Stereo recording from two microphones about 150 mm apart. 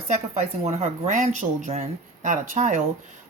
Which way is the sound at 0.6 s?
50° right (ahead or behind).